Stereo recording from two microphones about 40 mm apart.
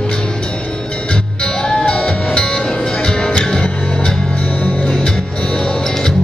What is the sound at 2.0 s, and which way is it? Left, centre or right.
Music, left.